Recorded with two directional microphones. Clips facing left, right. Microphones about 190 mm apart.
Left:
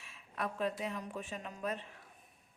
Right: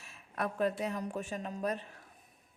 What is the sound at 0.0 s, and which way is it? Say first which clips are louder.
Speech: right 3 dB; 45° right (ahead or behind).